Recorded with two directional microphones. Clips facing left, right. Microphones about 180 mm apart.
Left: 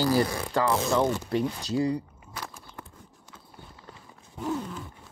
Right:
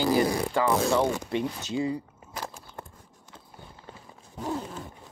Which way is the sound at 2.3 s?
35° right (ahead or behind).